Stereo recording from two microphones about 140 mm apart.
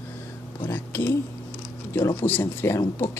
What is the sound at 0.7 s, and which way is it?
Speech, 15° left (ahead or behind).